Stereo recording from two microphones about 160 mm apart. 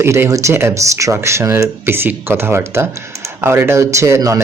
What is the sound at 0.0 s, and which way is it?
Speech, 15° right (ahead or behind).